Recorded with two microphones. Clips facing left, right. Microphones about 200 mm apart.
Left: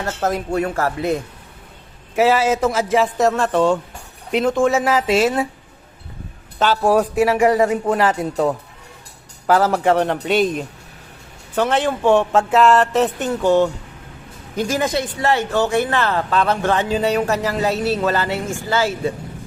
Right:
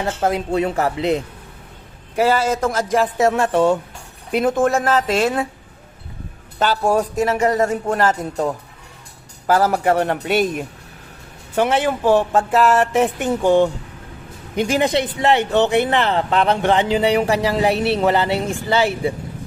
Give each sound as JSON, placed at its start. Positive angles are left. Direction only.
{"t": 0.0, "sound": "speech", "side_deg": -15}
{"t": 2.1, "sound": "a man's voice", "side_deg": 5}
{"t": 6.6, "sound": "a man's voice", "side_deg": 0}
{"t": 9.5, "sound": "speech", "side_deg": -5}
{"t": 17.7, "sound": "speech", "side_deg": -65}
{"t": 18.0, "sound": "speech", "side_deg": -20}